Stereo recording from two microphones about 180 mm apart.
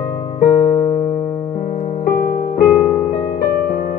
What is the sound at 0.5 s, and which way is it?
Electric piano, 15° left (ahead or behind).